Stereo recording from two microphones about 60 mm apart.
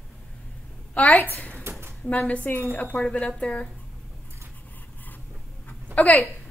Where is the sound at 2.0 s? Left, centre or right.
Left.